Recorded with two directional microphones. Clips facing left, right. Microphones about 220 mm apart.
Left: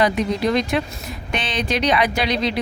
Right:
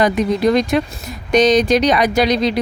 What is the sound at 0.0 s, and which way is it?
Speech, 45° right (ahead or behind).